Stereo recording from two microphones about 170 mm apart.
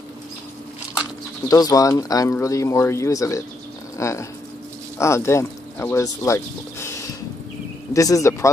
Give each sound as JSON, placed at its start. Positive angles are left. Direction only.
{"t": 1.5, "sound": "speech", "side_deg": 20}